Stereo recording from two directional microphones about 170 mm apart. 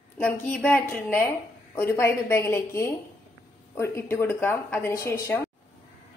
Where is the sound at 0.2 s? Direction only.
10° left (ahead or behind).